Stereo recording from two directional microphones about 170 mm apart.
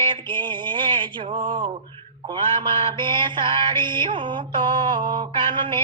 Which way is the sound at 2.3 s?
25° right (ahead or behind).